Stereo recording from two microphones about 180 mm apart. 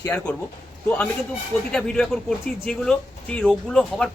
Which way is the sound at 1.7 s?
5° left (ahead or behind).